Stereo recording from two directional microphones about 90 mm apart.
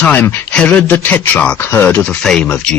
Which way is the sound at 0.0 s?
20° left (ahead or behind).